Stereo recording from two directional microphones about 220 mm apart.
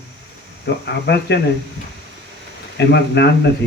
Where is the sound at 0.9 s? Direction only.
50° left (ahead or behind).